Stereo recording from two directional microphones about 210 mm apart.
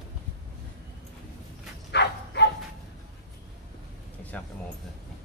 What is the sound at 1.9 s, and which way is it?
Bow-wow, 55° left (ahead or behind).